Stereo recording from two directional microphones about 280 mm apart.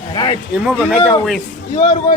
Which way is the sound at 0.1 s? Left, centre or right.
Centre.